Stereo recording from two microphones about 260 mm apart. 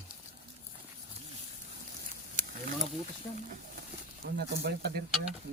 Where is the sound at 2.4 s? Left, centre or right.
Right.